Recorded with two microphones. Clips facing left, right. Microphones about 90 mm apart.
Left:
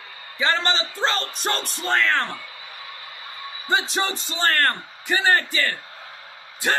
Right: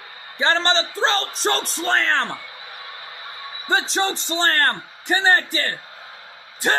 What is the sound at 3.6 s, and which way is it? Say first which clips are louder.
Speech: right 2 dB; 30° right (ahead or behind).